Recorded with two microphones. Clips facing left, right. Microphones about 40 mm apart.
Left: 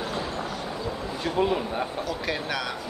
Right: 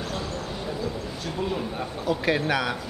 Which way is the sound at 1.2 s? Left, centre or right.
Left.